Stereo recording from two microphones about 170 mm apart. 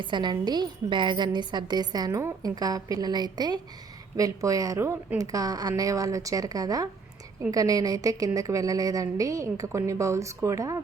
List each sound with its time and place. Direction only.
0.0 s a woman's voice: 25° right (ahead or behind)